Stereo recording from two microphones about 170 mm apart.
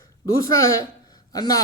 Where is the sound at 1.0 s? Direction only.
20° left (ahead or behind).